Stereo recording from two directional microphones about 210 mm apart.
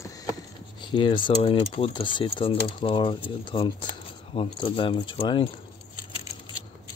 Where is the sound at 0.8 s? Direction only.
25° left (ahead or behind).